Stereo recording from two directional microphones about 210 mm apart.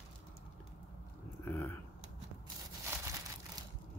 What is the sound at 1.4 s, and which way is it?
Speech, 10° left (ahead or behind).